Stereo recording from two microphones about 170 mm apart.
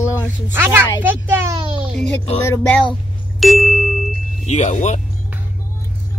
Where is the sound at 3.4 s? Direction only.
Centre (ahead or behind).